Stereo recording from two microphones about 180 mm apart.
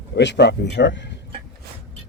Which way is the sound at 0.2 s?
70° left (ahead or behind).